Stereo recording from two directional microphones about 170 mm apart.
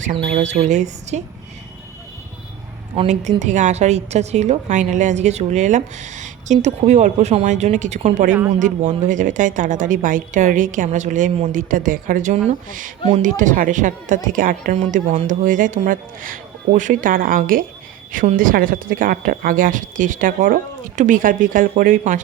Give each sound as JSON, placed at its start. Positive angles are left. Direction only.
{"t": 0.4, "sound": "a woman's voice", "side_deg": -40}
{"t": 2.9, "sound": "a woman's voice", "side_deg": -40}